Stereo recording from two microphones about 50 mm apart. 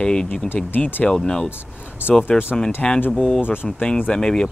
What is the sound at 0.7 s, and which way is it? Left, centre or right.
Speech, left.